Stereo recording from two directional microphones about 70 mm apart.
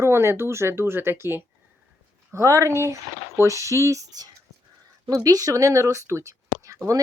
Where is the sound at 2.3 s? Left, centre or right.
Right.